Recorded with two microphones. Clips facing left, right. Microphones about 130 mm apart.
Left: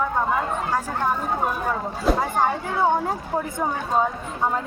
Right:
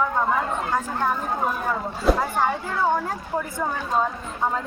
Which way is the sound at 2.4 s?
20° left (ahead or behind).